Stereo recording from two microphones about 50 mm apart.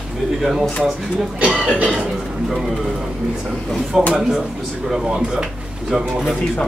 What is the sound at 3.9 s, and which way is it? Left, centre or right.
Speech, centre.